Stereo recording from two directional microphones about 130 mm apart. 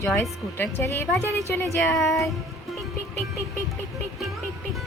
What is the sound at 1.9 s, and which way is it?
Speech, centre (ahead or behind).